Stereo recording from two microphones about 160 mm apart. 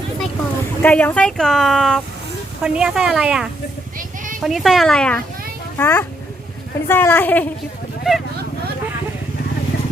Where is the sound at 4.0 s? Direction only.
55° right (ahead or behind).